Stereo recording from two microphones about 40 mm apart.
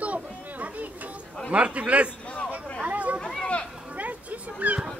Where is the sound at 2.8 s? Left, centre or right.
Right.